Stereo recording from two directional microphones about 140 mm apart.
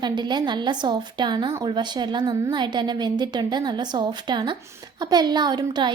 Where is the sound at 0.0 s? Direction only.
35° right (ahead or behind).